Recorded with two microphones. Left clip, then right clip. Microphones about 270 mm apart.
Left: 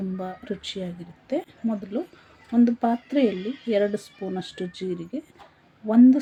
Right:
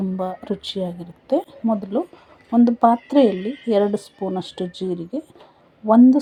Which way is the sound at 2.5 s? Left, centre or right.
Centre.